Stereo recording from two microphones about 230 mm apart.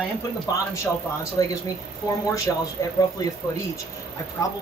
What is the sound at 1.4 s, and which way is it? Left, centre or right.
A man's voice, centre.